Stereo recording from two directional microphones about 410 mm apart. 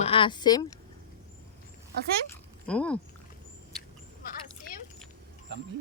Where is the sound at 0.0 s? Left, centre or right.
Centre.